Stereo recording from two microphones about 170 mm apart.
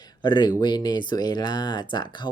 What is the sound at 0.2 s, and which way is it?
Speech, 25° left (ahead or behind).